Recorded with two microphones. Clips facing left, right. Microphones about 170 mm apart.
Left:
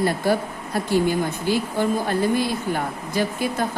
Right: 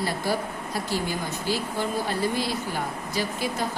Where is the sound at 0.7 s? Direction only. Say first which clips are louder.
Left 9 dB; 55° left (ahead or behind).